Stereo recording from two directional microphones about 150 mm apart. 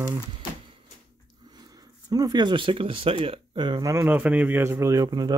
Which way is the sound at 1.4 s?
30° right (ahead or behind).